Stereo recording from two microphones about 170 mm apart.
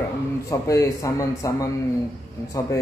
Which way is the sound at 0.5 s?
20° left (ahead or behind).